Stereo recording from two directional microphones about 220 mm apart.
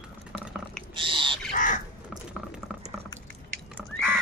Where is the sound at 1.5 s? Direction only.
35° left (ahead or behind).